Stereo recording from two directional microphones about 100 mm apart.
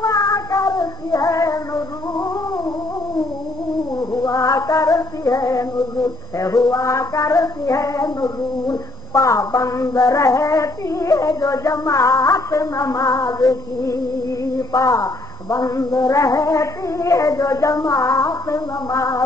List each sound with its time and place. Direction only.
0.0 s child singing: 35° left (ahead or behind)
4.1 s female singing: 30° left (ahead or behind)
6.4 s child singing: 35° left (ahead or behind)